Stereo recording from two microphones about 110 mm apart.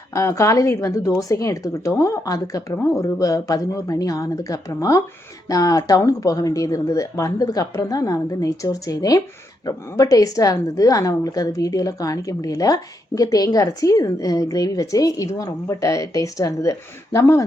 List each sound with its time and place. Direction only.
0.1 s a woman's voice: 25° left (ahead or behind)